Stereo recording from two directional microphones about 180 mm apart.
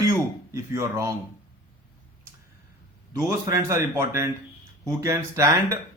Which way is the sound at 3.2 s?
15° right (ahead or behind).